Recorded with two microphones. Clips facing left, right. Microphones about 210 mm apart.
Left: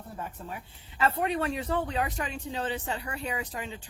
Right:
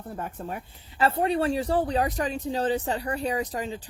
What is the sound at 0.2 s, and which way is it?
Speech, 50° right (ahead or behind).